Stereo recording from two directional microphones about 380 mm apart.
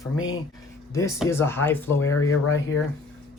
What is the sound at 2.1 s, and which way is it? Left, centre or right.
Speech, left.